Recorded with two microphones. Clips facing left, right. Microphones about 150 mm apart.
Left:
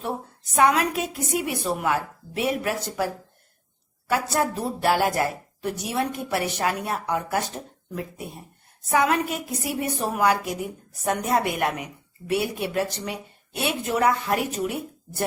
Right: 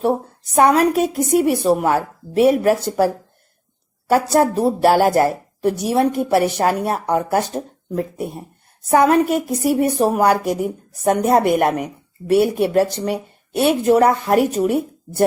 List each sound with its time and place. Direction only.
0.0 s a woman's voice: 40° right (ahead or behind)
4.1 s a woman's voice: 40° right (ahead or behind)